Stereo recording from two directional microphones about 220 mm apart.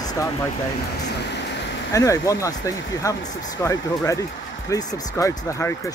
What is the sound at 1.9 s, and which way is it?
Speech, 15° left (ahead or behind).